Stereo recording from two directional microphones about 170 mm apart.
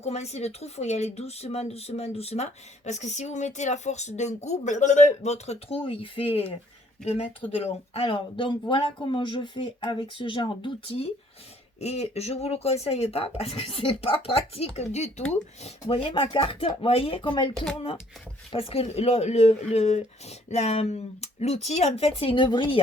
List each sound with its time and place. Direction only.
0.0 s speech: 40° left (ahead or behind)
18.5 s speech: 35° left (ahead or behind)